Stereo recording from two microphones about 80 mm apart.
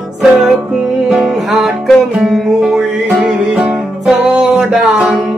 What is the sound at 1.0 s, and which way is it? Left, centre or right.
Music, centre.